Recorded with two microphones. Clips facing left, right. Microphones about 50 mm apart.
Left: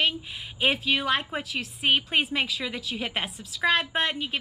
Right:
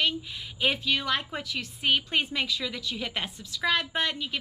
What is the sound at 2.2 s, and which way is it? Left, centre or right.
A woman's voice, centre.